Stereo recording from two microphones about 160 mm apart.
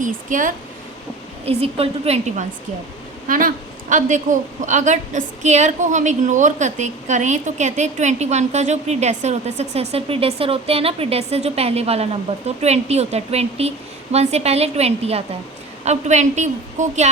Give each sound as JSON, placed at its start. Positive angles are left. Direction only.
{"t": 0.0, "sound": "speech", "side_deg": -55}
{"t": 1.5, "sound": "a woman's voice", "side_deg": -40}
{"t": 3.2, "sound": "a woman's voice", "side_deg": -60}